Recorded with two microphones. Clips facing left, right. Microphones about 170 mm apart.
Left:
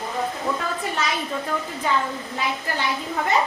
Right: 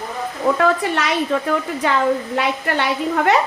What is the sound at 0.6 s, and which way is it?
A woman's voice, 75° right (ahead or behind).